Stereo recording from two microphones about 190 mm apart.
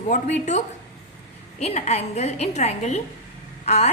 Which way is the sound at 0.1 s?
40° left (ahead or behind).